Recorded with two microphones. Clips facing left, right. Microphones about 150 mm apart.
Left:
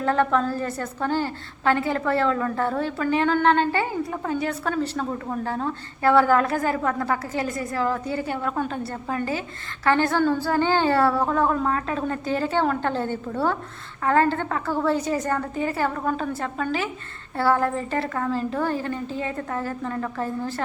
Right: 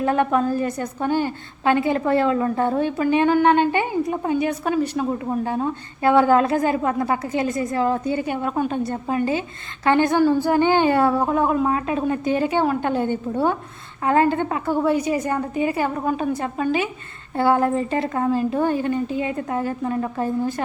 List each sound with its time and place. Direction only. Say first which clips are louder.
0.0 s a woman's voice: right 2 dB; 15° right (ahead or behind)